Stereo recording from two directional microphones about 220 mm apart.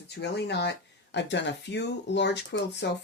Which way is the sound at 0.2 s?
50° left (ahead or behind).